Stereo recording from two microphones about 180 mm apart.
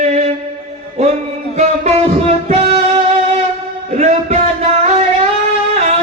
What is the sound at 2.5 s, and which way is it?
Music, 35° right (ahead or behind).